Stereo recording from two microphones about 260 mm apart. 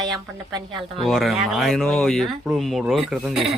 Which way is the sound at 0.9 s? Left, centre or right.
Centre.